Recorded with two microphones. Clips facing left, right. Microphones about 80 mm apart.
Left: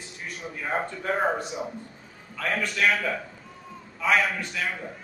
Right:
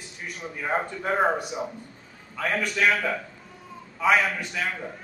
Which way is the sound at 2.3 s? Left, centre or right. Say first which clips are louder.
Right 1 dB; centre.